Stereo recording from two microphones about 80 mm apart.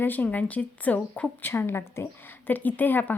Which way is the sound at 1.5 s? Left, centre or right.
Left.